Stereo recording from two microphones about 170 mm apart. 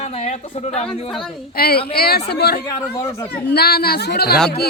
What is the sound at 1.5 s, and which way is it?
Speech, 65° left (ahead or behind).